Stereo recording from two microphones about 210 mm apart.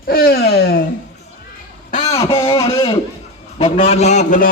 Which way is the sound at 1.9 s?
30° left (ahead or behind).